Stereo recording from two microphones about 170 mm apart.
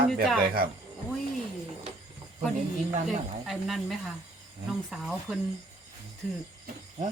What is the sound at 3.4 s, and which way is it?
Speech, centre (ahead or behind).